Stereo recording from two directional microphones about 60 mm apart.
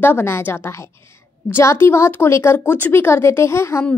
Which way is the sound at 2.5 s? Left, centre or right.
Left.